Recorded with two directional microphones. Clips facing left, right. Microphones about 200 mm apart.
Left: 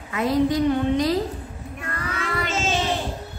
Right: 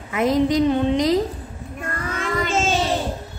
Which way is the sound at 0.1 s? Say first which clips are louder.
Right 2 dB; 20° right (ahead or behind).